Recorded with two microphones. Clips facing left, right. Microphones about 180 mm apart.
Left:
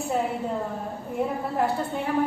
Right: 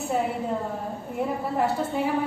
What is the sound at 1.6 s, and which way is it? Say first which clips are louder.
Speech: right 1 dB; centre (ahead or behind).